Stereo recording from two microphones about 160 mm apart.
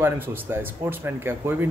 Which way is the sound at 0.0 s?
15° right (ahead or behind).